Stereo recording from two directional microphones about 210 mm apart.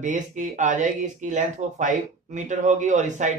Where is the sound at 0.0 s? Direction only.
35° right (ahead or behind).